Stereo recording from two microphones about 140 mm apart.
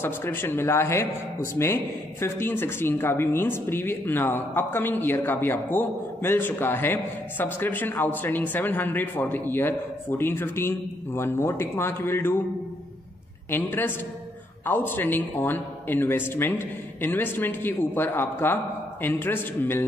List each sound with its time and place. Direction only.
0.0 s speech: 15° left (ahead or behind)
13.5 s speech: 15° left (ahead or behind)